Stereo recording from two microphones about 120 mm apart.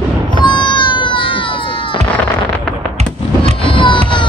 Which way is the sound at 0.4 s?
40° left (ahead or behind).